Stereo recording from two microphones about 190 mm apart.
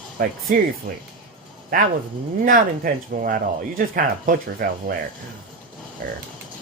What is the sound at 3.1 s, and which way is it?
Speech, 45° right (ahead or behind).